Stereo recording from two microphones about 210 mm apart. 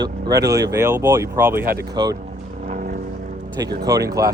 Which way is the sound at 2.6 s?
40° right (ahead or behind).